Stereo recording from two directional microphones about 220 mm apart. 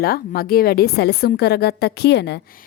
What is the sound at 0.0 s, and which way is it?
A woman's voice, 45° left (ahead or behind).